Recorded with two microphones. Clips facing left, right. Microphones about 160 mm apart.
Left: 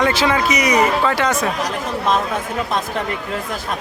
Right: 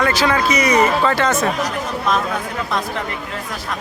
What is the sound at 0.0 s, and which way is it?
Speech, 20° left (ahead or behind).